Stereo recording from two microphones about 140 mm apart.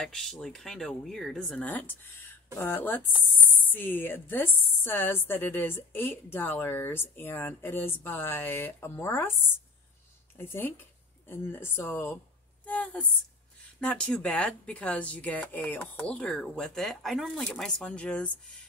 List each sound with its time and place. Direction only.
0.0 s a woman's voice: centre (ahead or behind)
10.3 s a woman's voice: 15° left (ahead or behind)